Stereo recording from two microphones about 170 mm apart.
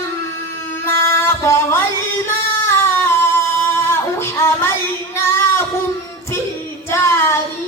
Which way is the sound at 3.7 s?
15° left (ahead or behind).